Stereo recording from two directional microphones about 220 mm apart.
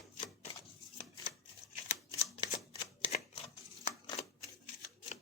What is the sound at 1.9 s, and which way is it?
Shuffling cards, 25° left (ahead or behind).